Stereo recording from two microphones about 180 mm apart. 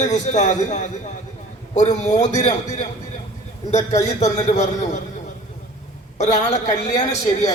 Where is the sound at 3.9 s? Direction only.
40° left (ahead or behind).